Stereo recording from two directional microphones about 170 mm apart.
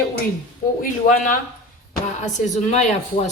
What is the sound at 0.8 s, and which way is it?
Speech, 55° left (ahead or behind).